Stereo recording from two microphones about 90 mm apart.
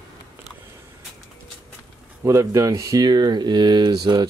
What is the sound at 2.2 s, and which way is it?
Speech, 35° right (ahead or behind).